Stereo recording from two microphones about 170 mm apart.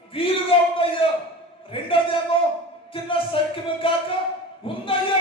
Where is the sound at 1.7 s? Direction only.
30° left (ahead or behind).